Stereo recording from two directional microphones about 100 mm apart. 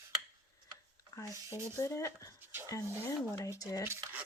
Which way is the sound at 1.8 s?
30° left (ahead or behind).